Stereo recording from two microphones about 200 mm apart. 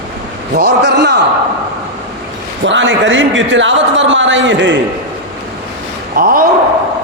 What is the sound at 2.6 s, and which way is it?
A man's voice, 65° right (ahead or behind).